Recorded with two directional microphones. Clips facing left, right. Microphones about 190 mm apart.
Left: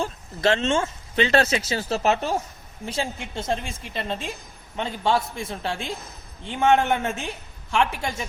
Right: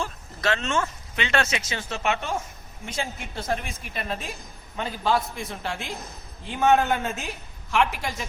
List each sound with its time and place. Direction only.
0.0 s a woman's voice: 30° left (ahead or behind)